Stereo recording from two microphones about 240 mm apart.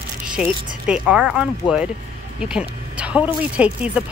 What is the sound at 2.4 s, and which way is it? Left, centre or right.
Speech, centre.